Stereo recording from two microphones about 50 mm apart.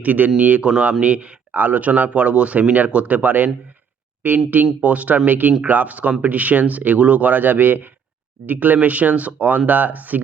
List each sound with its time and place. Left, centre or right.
0.0 s speech: right
4.6 s speech: right